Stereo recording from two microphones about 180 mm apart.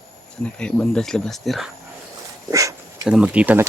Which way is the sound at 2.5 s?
20° right (ahead or behind).